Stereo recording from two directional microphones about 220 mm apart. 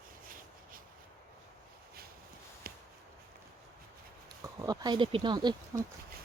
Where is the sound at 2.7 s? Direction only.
40° right (ahead or behind).